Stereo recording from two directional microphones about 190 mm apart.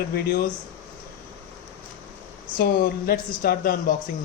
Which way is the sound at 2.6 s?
50° left (ahead or behind).